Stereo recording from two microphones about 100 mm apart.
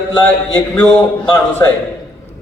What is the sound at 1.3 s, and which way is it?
Speech, 20° left (ahead or behind).